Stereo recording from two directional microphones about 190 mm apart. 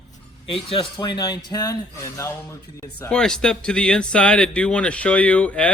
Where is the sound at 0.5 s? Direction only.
30° left (ahead or behind).